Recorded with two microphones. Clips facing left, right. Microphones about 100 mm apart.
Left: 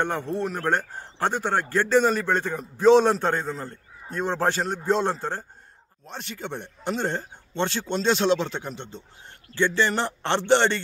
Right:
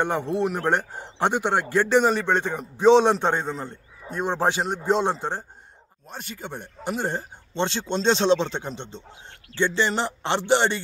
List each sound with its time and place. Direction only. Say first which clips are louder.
0.0 s a man's voice: right 3 dB; 15° right (ahead or behind)
6.0 s speech: left 2 dB; 5° right (ahead or behind)
7.5 s a man's voice: right 1 dB; 25° right (ahead or behind)